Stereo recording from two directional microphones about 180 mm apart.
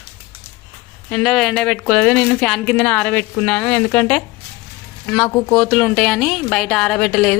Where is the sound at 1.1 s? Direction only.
Centre (ahead or behind).